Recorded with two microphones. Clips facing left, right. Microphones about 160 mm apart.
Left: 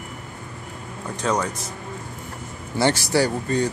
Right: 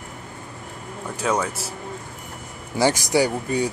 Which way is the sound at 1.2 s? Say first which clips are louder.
Even; 5° right (ahead or behind).